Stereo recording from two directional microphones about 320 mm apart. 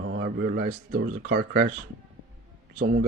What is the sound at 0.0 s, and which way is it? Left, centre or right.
Speech, right.